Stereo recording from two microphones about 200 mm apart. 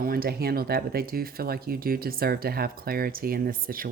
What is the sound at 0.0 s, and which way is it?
Speech, 45° right (ahead or behind).